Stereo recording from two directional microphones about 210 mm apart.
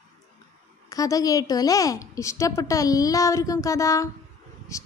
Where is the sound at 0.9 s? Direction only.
15° left (ahead or behind).